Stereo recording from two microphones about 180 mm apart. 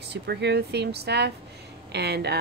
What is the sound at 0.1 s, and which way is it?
Speech, 70° right (ahead or behind).